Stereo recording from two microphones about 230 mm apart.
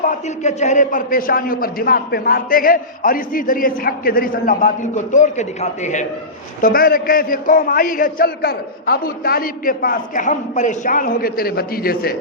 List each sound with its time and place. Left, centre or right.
0.0 s a man's voice: left